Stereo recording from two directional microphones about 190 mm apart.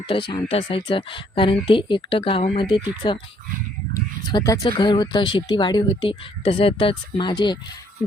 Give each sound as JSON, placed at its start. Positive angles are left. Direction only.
{"t": 0.1, "sound": "speech", "side_deg": 25}
{"t": 4.3, "sound": "speech", "side_deg": 20}